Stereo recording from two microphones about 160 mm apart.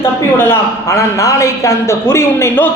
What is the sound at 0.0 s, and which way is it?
A man's voice, 15° left (ahead or behind).